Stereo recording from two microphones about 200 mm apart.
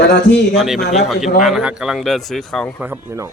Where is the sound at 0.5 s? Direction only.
Centre (ahead or behind).